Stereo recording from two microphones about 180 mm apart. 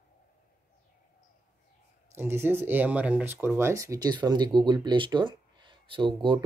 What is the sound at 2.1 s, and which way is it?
Speech, 15° right (ahead or behind).